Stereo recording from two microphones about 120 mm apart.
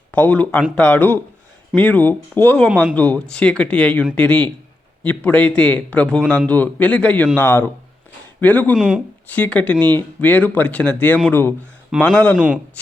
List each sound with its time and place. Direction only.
0.1 s speech: 10° left (ahead or behind)